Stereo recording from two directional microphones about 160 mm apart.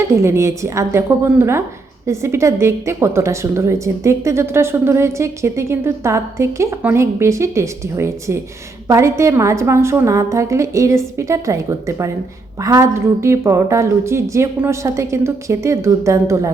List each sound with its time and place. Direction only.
0.1 s a woman's voice: 15° right (ahead or behind)